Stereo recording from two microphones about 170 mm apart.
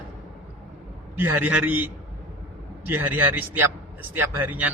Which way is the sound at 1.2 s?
10° right (ahead or behind).